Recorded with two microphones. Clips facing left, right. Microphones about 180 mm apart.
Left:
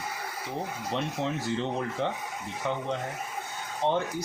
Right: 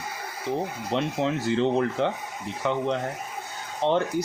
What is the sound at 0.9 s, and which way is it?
Speech, 90° right.